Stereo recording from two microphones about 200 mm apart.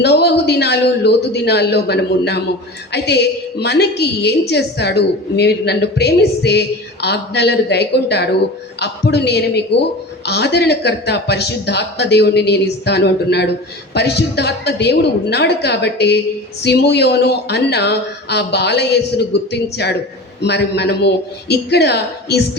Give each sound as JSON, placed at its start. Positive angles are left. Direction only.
{"t": 0.0, "sound": "a woman's voice", "side_deg": 55}